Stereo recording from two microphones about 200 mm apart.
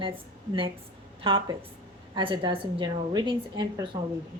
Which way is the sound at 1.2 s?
25° right (ahead or behind).